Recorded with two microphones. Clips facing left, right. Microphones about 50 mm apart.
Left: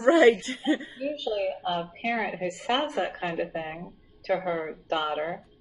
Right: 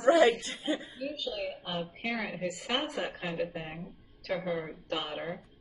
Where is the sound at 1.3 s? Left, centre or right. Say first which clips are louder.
Left 9 dB; centre.